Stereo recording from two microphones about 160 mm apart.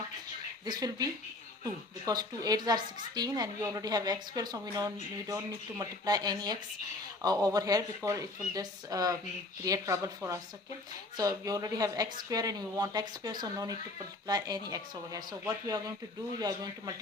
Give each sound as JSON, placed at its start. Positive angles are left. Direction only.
{"t": 0.6, "sound": "a woman's voice", "side_deg": -25}